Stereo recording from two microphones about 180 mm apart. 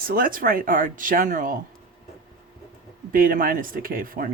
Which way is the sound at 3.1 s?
50° right (ahead or behind).